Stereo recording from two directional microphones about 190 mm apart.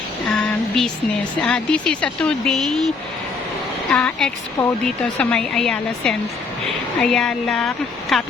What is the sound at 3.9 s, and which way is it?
Speech, 5° left (ahead or behind).